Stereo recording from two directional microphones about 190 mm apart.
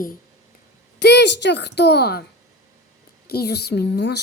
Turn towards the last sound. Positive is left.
turn(degrees=60)  # may be behind; listen again after turning